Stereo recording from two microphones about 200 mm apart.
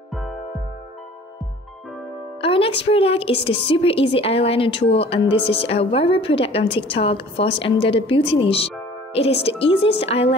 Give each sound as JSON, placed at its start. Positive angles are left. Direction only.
{"t": 0.1, "sound": "music", "side_deg": 0}
{"t": 2.4, "sound": "a woman's voice", "side_deg": 30}